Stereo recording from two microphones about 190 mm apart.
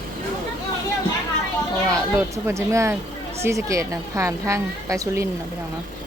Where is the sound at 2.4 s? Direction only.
15° right (ahead or behind).